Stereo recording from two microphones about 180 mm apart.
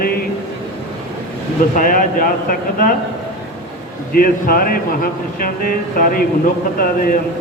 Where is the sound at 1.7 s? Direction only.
50° left (ahead or behind).